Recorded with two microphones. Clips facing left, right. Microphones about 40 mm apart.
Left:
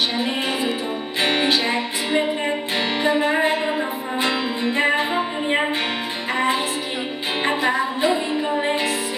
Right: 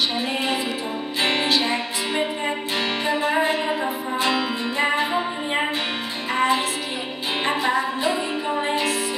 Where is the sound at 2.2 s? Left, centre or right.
Centre.